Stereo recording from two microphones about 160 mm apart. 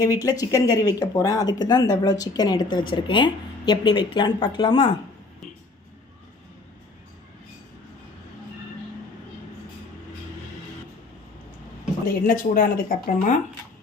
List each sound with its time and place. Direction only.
0.0 s speech: 20° left (ahead or behind)
12.0 s speech: 60° left (ahead or behind)